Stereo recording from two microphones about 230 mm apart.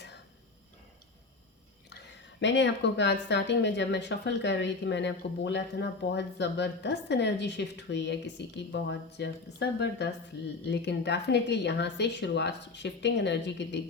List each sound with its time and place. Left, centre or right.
2.4 s speech: left